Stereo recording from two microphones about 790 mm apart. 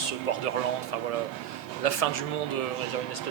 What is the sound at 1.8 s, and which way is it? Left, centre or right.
Speech, left.